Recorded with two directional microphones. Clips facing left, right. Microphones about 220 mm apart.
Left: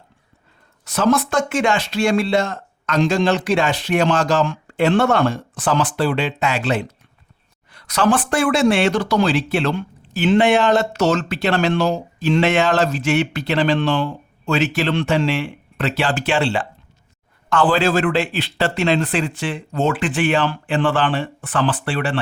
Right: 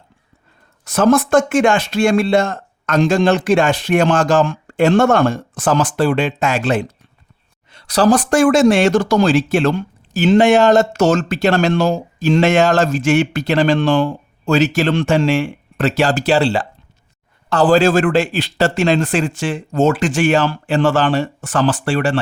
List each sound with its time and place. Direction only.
0.9 s speech: 50° right (ahead or behind)
7.7 s speech: 30° right (ahead or behind)